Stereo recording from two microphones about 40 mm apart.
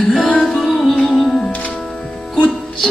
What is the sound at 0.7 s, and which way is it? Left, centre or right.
Music, centre.